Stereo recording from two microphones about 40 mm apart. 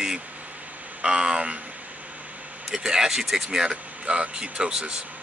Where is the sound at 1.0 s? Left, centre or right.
Right.